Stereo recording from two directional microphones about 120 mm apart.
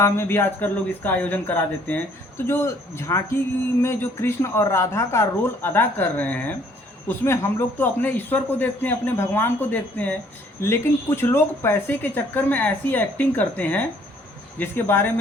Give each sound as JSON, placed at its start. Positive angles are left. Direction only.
{"t": 0.0, "sound": "a man's voice", "side_deg": 20}